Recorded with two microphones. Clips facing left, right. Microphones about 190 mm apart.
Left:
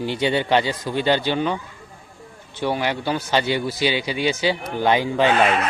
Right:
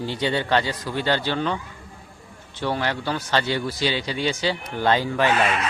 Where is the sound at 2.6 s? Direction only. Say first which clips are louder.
Left 2 dB; 15° left (ahead or behind).